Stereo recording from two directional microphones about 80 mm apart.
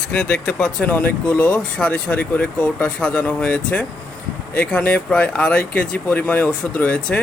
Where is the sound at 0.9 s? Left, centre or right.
Left.